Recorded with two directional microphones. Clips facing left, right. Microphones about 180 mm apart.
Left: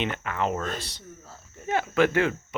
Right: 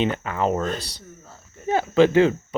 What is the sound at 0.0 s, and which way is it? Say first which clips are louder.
Speech: right 5 dB; 35° right (ahead or behind).